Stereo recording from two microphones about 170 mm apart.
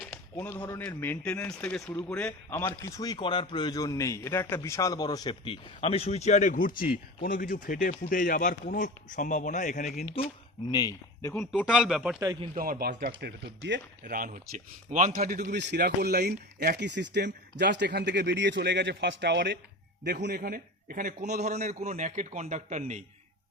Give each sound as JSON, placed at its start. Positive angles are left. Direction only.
{"t": 0.3, "sound": "a man's voice", "side_deg": 10}
{"t": 10.2, "sound": "speech", "side_deg": 35}
{"t": 10.7, "sound": "speech", "side_deg": 25}
{"t": 11.3, "sound": "speech", "side_deg": 10}
{"t": 12.2, "sound": "a man's voice", "side_deg": -25}
{"t": 12.5, "sound": "a man's voice", "side_deg": -55}
{"t": 15.1, "sound": "a man's voice", "side_deg": -55}
{"t": 15.5, "sound": "speech", "side_deg": -85}
{"t": 20.1, "sound": "a man's voice", "side_deg": -75}